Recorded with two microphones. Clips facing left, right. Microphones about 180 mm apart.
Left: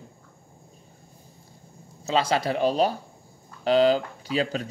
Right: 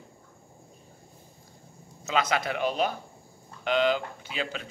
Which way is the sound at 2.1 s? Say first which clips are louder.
Left 4 dB; 30° left (ahead or behind).